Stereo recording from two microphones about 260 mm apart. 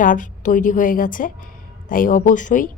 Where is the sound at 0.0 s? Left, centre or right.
Left.